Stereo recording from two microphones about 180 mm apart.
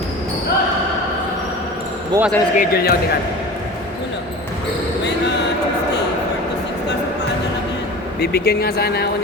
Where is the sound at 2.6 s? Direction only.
60° left (ahead or behind).